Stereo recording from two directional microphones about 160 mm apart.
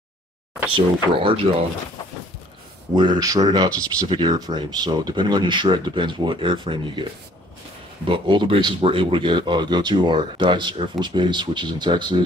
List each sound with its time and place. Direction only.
0.7 s speech: 35° right (ahead or behind)
2.9 s speech: 25° right (ahead or behind)
8.1 s speech: 30° right (ahead or behind)